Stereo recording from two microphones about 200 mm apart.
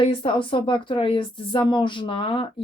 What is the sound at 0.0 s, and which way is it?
Speech, 25° left (ahead or behind).